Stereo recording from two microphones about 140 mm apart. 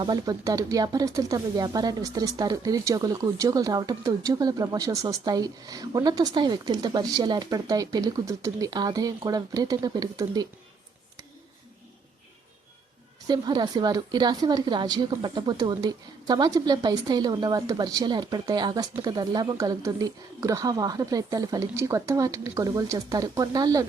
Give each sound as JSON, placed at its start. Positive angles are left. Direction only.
{"t": 0.0, "sound": "speech", "side_deg": -30}
{"t": 13.2, "sound": "speech", "side_deg": -30}